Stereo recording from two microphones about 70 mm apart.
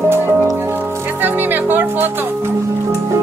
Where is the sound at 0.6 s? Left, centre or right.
Right.